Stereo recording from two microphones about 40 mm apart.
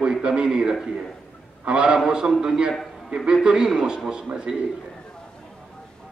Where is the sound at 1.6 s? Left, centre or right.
Right.